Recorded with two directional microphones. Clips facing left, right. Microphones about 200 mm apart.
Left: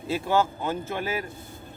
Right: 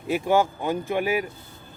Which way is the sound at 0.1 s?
15° right (ahead or behind).